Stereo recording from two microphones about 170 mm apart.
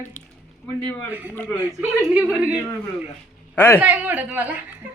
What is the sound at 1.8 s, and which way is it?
Speech, 10° right (ahead or behind).